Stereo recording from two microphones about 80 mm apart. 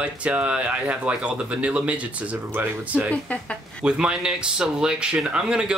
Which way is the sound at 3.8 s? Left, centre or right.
Centre.